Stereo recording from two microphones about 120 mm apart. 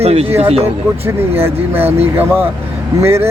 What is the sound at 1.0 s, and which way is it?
Speech, 20° right (ahead or behind).